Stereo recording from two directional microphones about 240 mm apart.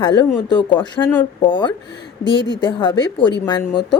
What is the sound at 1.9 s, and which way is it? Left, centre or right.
Speech, left.